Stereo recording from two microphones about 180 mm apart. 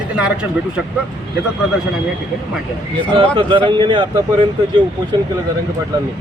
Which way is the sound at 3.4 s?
25° right (ahead or behind).